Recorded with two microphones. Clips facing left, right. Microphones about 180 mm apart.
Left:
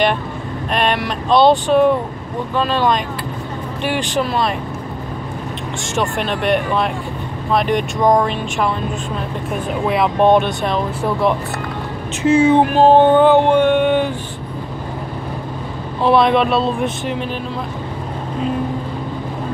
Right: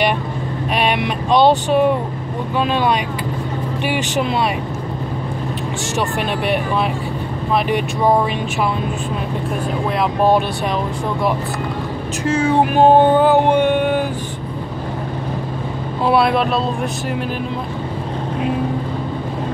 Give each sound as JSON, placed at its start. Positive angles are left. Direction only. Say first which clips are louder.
{"t": 0.7, "sound": "speech", "louder": "even", "side_deg": -10}
{"t": 6.1, "sound": "speech", "louder": "left 3 dB", "side_deg": -5}
{"t": 9.8, "sound": "speech", "louder": "left 3 dB", "side_deg": 0}
{"t": 12.2, "sound": "speech", "louder": "left 6 dB", "side_deg": 5}
{"t": 12.7, "sound": "a sound", "louder": "right 1 dB", "side_deg": -10}
{"t": 16.1, "sound": "speech", "louder": "left 2 dB", "side_deg": -5}